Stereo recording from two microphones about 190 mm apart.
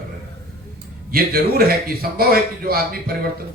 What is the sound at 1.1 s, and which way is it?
A man's voice, 50° right (ahead or behind).